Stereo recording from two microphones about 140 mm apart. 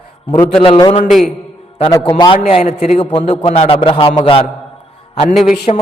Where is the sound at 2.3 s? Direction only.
50° left (ahead or behind).